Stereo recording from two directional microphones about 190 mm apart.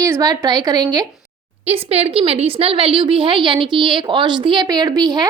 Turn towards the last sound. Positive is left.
turn(degrees=-20)  # may be behind; listen again after turning